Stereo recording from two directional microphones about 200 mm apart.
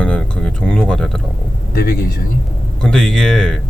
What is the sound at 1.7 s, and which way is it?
Speech, 50° left (ahead or behind).